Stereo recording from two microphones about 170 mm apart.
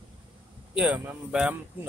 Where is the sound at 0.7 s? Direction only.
10° right (ahead or behind).